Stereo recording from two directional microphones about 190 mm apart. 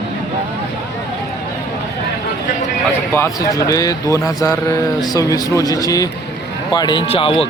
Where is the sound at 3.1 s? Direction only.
15° left (ahead or behind).